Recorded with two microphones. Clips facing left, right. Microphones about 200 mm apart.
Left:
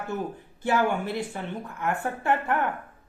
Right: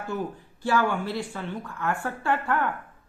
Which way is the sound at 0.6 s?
20° left (ahead or behind).